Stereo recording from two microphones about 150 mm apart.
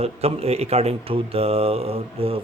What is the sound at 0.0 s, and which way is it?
Speech, 45° right (ahead or behind).